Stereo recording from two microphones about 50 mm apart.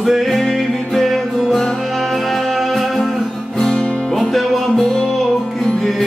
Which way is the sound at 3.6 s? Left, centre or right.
Centre.